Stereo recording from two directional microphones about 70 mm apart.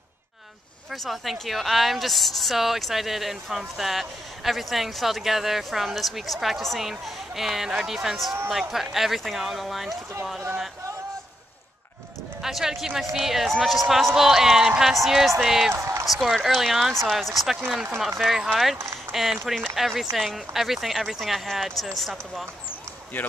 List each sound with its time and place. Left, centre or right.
0.9 s speech: centre
12.4 s speech: centre
15.7 s speech: right
16.1 s speech: centre
19.1 s a sound: right
19.4 s speech: centre